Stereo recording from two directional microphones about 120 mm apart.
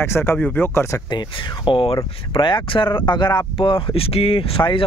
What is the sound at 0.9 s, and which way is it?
Speech, 40° left (ahead or behind).